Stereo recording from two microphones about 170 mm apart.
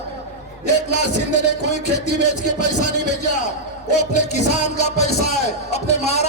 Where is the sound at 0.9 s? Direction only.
40° left (ahead or behind).